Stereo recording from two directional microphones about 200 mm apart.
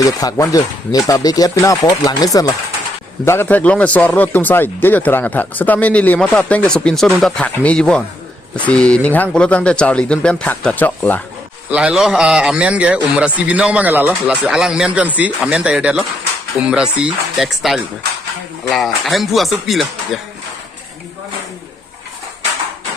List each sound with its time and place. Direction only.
0.0 s speech: 20° left (ahead or behind)
11.7 s a man's voice: 5° right (ahead or behind)